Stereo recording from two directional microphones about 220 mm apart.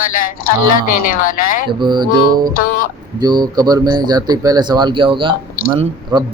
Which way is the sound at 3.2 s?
20° right (ahead or behind).